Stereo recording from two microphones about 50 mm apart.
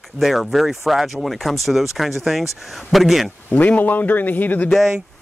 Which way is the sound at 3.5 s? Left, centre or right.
Left.